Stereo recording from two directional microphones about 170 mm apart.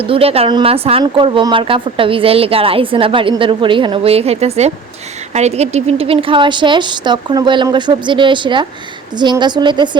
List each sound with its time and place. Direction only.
0.0 s a woman's voice: 35° right (ahead or behind)